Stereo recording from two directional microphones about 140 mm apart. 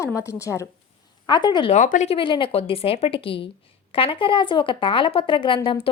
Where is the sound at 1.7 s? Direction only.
60° left (ahead or behind).